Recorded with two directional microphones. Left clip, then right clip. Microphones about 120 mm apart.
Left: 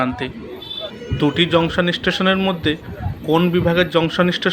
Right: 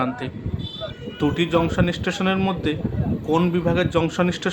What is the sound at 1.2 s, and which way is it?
Speech, 25° left (ahead or behind).